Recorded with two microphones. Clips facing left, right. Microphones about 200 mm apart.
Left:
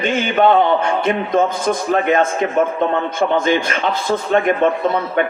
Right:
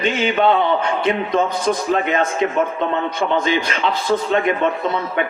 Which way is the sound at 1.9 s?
45° left (ahead or behind).